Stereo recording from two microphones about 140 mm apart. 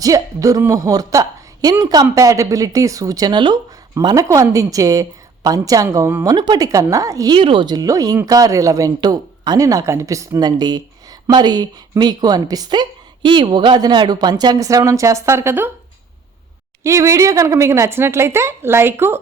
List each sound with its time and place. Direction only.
0.0 s a man's voice: 25° right (ahead or behind)
6.2 s speech: 30° right (ahead or behind)
7.3 s speech: 35° right (ahead or behind); by 15.7 s 15° right (ahead or behind)
16.8 s speech: 20° right (ahead or behind)